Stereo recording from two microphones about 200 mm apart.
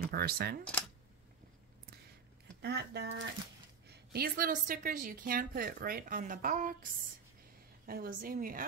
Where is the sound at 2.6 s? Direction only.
55° right (ahead or behind).